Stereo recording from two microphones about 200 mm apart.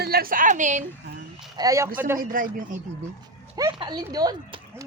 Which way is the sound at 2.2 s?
45° right (ahead or behind).